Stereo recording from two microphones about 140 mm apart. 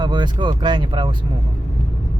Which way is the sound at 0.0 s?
30° right (ahead or behind).